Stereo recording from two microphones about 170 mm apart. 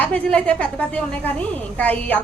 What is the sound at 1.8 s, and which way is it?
Speech, 10° left (ahead or behind).